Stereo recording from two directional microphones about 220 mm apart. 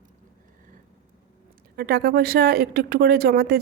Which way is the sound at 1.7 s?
45° right (ahead or behind).